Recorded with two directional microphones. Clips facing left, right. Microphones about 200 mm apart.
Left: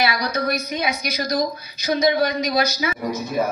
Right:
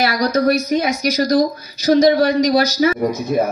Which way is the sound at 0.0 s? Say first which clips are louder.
Right 6 dB; 40° right (ahead or behind).